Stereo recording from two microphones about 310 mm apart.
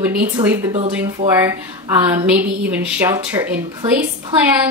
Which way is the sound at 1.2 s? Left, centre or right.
Right.